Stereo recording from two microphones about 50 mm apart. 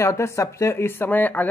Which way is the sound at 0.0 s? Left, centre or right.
Left.